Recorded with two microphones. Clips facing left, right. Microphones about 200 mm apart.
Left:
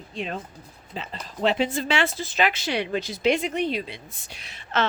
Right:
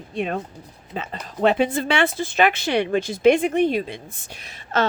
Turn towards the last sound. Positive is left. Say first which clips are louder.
# right 3 dB
turn(degrees=-40)  # may be behind; listen again after turning